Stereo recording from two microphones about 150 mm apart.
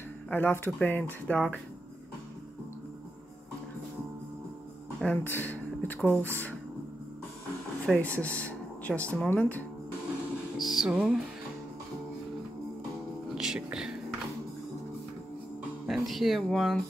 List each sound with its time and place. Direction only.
0.3 s speech: 10° left (ahead or behind)
5.0 s speech: 10° left (ahead or behind)
7.8 s speech: 10° left (ahead or behind)
10.6 s speech: centre (ahead or behind)
13.3 s whispering: 5° right (ahead or behind)
15.9 s speech: centre (ahead or behind)